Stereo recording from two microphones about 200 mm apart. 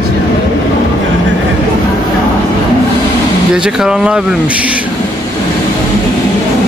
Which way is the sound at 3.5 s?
5° right (ahead or behind).